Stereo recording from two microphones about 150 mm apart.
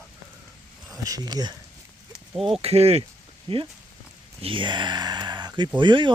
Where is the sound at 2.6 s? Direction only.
45° right (ahead or behind).